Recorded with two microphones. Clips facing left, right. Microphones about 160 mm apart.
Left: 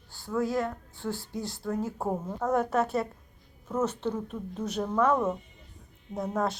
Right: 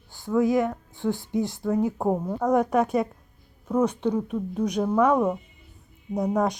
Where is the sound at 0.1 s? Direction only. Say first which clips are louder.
Right 7 dB; 15° right (ahead or behind).